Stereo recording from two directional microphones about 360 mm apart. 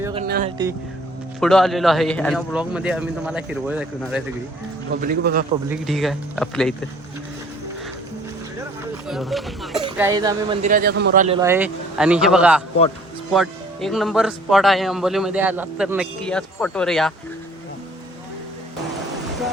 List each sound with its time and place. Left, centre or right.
0.0 s music: centre
1.4 s speech: centre
4.9 s speech: right
5.6 s speech: centre
9.0 s speech: centre; by 11.3 s right
11.3 s speech: centre